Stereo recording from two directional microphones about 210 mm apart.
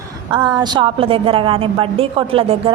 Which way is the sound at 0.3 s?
20° right (ahead or behind).